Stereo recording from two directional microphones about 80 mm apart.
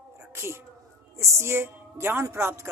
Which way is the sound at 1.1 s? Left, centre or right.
Right.